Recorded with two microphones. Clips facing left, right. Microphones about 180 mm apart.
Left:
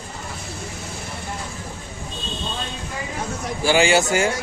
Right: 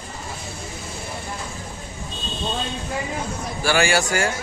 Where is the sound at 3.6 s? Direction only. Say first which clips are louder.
Left 3 dB; 20° left (ahead or behind).